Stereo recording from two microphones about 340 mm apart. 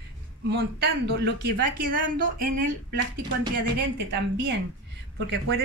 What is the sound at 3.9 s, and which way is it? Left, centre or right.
A man's voice, right.